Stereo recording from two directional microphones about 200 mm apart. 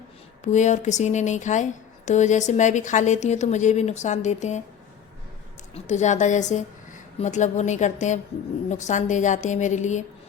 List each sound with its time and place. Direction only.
0.4 s speech: 35° left (ahead or behind)
5.7 s a woman's voice: 35° left (ahead or behind)